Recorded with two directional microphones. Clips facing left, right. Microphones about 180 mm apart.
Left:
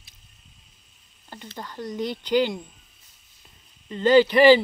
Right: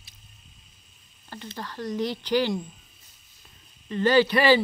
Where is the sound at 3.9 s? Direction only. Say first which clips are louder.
Left 3 dB; 20° left (ahead or behind).